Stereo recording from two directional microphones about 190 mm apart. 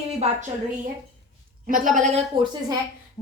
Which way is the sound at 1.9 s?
40° right (ahead or behind).